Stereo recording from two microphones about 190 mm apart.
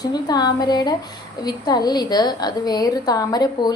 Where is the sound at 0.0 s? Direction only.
20° left (ahead or behind).